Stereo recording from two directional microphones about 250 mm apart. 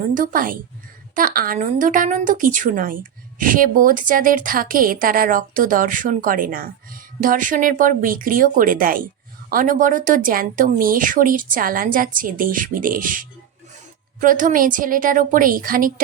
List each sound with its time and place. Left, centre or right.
0.1 s a woman's voice: right